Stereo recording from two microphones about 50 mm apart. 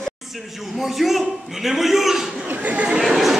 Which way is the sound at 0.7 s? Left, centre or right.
Centre.